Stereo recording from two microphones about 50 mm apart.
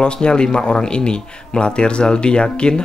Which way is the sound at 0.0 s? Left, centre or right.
Centre.